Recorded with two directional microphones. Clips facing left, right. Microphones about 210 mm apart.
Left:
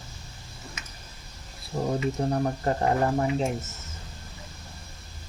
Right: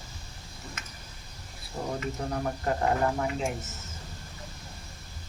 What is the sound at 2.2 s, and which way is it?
Speech, 30° left (ahead or behind).